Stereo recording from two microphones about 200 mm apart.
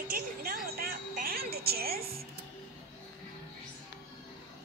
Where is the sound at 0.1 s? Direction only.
45° right (ahead or behind).